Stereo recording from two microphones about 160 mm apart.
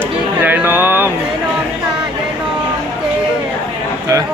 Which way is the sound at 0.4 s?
10° right (ahead or behind).